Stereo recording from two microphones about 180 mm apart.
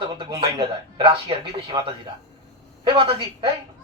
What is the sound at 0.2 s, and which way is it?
A man's voice, 30° right (ahead or behind).